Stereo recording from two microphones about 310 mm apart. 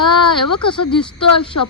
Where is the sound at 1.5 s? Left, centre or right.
Left.